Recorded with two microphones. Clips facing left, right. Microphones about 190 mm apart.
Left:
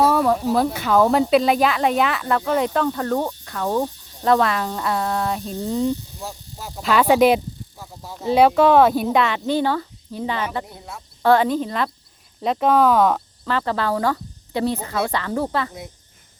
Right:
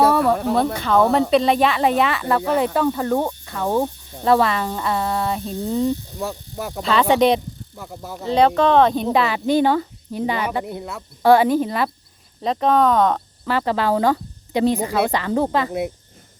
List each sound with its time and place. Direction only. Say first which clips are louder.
0.1 s a sound: right 1 dB; centre (ahead or behind)
0.5 s speech: even; 5° left (ahead or behind); by 3.3 s 10° right (ahead or behind)
3.4 s frog: right 1 dB; centre (ahead or behind)
3.7 s speech: right 2 dB; 10° right (ahead or behind)
6.1 s speech: right 7 dB; 60° right (ahead or behind)
6.8 s speech: left 1 dB; 5° left (ahead or behind)
9.2 s speech: right 3 dB; 10° right (ahead or behind)
10.7 s speech: right 8 dB; 65° right (ahead or behind)
11.2 s speech: right 3 dB; 10° right (ahead or behind)
12.4 s speech: even; 5° left (ahead or behind)
13.4 s speech: right 3 dB; 15° right (ahead or behind)